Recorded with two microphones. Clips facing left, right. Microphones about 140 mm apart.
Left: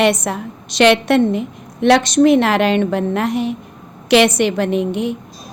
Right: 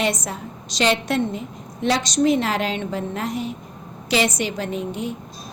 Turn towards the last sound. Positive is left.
turn(degrees=70)  # may be behind; listen again after turning